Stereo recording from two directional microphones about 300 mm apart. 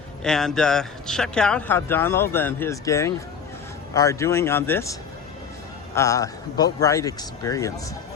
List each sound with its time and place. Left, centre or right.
0.2 s speech: centre